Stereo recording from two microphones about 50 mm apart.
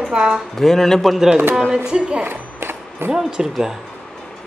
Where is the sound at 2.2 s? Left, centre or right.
Right.